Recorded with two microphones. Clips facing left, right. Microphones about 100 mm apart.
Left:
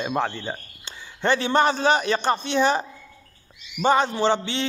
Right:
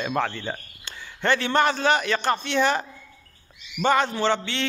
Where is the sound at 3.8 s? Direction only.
20° left (ahead or behind).